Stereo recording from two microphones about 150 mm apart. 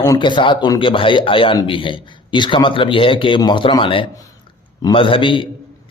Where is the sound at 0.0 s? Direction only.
25° left (ahead or behind).